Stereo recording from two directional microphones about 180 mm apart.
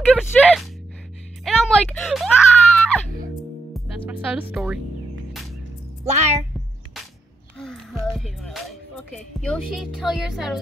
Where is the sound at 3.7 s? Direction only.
5° right (ahead or behind).